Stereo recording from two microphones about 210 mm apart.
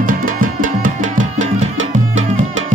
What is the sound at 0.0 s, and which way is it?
Music, 40° right (ahead or behind).